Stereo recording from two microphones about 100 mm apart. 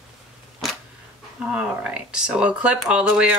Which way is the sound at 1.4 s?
10° right (ahead or behind).